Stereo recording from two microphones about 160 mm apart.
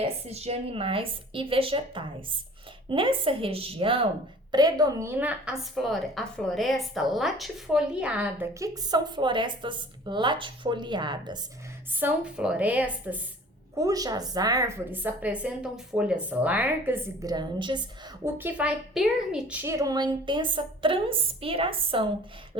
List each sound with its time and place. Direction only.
0.0 s a woman's voice: 40° right (ahead or behind); by 8.4 s 5° right (ahead or behind)
8.5 s a woman's voice: 20° right (ahead or behind)
11.9 s a woman's voice: 10° right (ahead or behind)
13.7 s a woman's voice: 20° right (ahead or behind)
17.3 s a woman's voice: 30° right (ahead or behind)
18.3 s a woman's voice: 10° right (ahead or behind); by 22.0 s 35° right (ahead or behind)